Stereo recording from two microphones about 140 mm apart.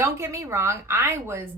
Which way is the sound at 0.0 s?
20° right (ahead or behind).